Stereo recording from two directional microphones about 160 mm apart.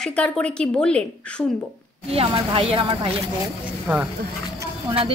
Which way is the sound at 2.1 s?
35° right (ahead or behind).